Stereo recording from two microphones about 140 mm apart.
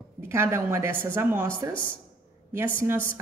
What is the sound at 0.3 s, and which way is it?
A woman's voice, 20° right (ahead or behind).